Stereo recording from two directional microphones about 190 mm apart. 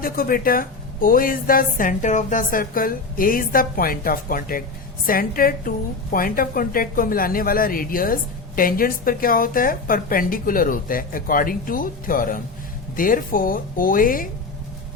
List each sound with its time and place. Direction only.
0.0 s a woman's voice: 50° left (ahead or behind)